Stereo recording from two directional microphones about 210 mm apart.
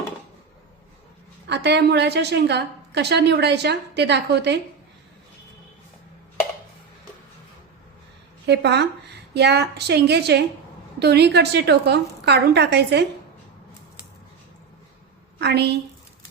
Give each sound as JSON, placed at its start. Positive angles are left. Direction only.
{"t": 1.5, "sound": "a woman's voice", "side_deg": -55}
{"t": 8.4, "sound": "a woman's voice", "side_deg": -55}
{"t": 15.4, "sound": "a woman's voice", "side_deg": -55}